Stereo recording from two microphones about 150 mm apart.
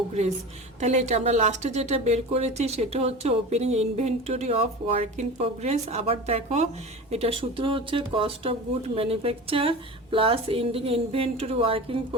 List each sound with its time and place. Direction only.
0.1 s a woman's voice: 45° right (ahead or behind)